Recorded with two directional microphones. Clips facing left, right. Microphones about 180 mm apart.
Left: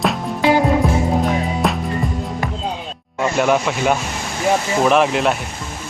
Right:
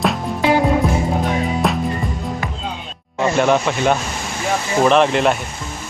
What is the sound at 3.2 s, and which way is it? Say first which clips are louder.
Speech: right 1 dB; 5° left (ahead or behind).